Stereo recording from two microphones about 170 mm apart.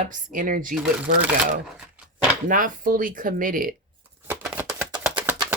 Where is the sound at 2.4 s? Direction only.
50° right (ahead or behind).